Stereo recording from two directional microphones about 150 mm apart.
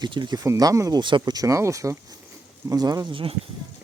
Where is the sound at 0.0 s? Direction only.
30° right (ahead or behind).